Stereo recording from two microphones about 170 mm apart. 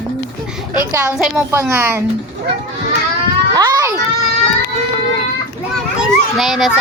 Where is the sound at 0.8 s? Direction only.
15° right (ahead or behind).